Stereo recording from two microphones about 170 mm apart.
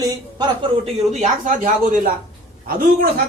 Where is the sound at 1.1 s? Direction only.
50° right (ahead or behind).